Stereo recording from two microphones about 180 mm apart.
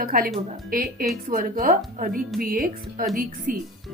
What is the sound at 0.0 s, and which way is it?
Speech, 50° right (ahead or behind).